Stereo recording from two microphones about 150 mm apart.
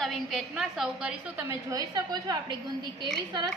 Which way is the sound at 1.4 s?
20° right (ahead or behind).